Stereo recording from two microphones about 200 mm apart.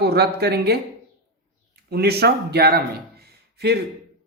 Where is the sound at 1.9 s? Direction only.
55° right (ahead or behind).